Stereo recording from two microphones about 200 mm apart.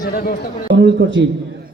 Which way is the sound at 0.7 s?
60° right (ahead or behind).